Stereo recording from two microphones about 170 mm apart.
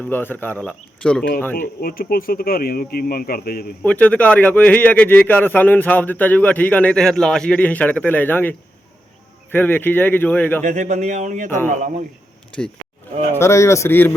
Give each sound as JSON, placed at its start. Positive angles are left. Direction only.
{"t": 0.0, "sound": "a man's voice", "side_deg": 10}
{"t": 1.5, "sound": "speech", "side_deg": 55}
{"t": 3.8, "sound": "a man's voice", "side_deg": 10}
{"t": 10.6, "sound": "speech", "side_deg": -45}
{"t": 11.4, "sound": "a man's voice", "side_deg": 10}
{"t": 11.7, "sound": "speech", "side_deg": -45}
{"t": 13.4, "sound": "a man's voice", "side_deg": 15}